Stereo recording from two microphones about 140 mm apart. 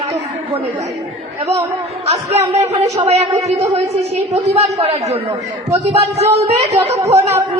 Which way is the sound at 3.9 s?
50° right (ahead or behind).